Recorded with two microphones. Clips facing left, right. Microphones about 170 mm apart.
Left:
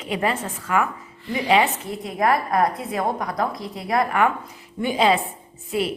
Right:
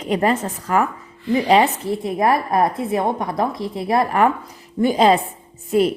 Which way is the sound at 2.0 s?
25° right (ahead or behind).